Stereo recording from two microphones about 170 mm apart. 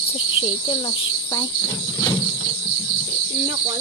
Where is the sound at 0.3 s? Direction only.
30° left (ahead or behind).